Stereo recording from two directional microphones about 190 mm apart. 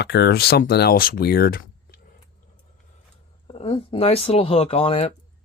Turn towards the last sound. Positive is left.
turn(degrees=30)  # may be behind; listen again after turning